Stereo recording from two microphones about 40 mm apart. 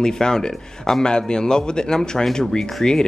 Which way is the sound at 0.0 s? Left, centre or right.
Centre.